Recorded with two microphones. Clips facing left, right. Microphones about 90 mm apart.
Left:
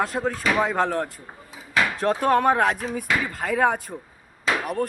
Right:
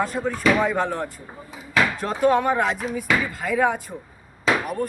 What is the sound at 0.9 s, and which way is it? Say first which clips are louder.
Speech: left 2 dB; 65° left (ahead or behind).